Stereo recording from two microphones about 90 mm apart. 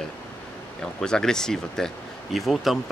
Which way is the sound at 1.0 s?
5° left (ahead or behind).